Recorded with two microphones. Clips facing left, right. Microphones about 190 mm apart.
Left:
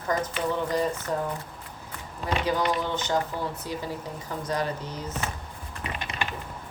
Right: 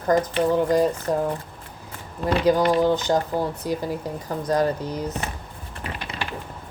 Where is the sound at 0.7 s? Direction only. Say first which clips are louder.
Right 7 dB; 40° right (ahead or behind).